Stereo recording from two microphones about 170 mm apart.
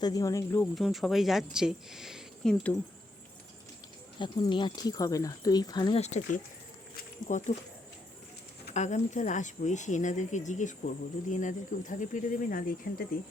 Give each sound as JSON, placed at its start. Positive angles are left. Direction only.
{"t": 0.0, "sound": "speech", "side_deg": 20}
{"t": 0.8, "sound": "speech", "side_deg": 0}
{"t": 4.2, "sound": "speech", "side_deg": 30}
{"t": 6.0, "sound": "speech", "side_deg": 40}
{"t": 8.7, "sound": "speech", "side_deg": 45}